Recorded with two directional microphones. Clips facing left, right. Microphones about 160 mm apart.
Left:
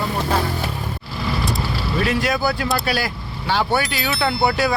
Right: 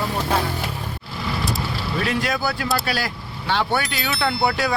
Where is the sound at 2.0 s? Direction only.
5° left (ahead or behind).